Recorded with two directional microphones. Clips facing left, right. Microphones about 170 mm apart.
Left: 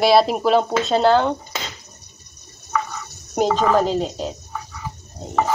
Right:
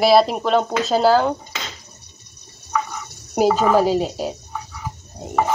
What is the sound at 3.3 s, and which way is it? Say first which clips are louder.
Speech: right 2 dB; 10° right (ahead or behind).